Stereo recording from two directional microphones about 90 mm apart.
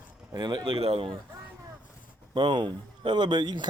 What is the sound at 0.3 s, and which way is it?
Speech, 55° right (ahead or behind).